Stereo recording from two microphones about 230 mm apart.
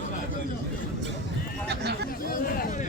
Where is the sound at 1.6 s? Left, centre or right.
Right.